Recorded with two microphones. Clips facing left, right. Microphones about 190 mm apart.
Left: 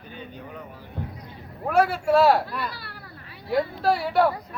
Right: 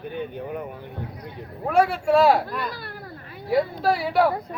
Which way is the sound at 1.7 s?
5° left (ahead or behind).